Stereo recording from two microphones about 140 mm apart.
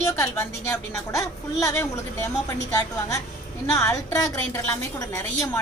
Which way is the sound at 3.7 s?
25° left (ahead or behind).